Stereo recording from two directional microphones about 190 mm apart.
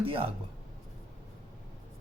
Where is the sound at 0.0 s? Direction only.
30° right (ahead or behind).